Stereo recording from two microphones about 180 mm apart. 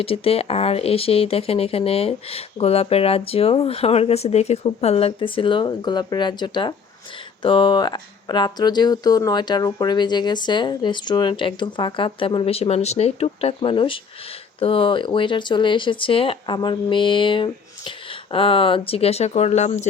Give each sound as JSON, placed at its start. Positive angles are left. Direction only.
{"t": 0.0, "sound": "speech", "side_deg": 30}